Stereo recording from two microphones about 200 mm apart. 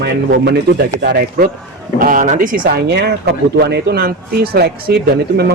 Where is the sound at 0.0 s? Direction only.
55° right (ahead or behind).